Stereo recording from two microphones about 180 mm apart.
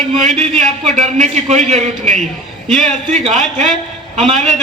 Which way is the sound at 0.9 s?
40° right (ahead or behind).